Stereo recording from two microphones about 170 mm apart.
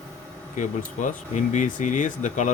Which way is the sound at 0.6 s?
45° left (ahead or behind).